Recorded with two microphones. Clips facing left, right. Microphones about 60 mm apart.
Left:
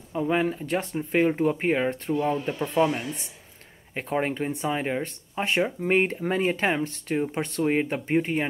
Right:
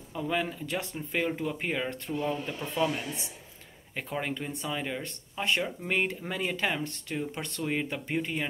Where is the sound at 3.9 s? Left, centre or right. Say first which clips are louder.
Left 7 dB; left.